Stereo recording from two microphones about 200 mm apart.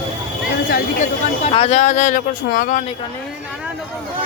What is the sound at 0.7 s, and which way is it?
Speech, 40° left (ahead or behind).